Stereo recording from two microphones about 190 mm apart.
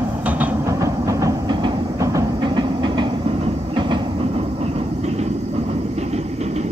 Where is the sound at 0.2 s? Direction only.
10° right (ahead or behind).